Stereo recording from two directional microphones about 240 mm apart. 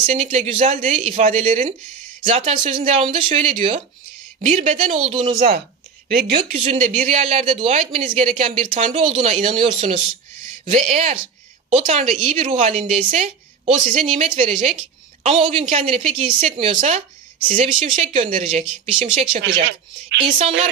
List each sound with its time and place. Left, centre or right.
0.0 s a woman's voice: right
6.1 s speech: right
6.6 s a woman's voice: right
19.6 s speech: right